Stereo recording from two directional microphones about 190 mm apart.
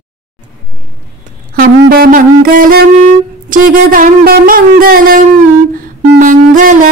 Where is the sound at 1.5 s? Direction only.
50° right (ahead or behind).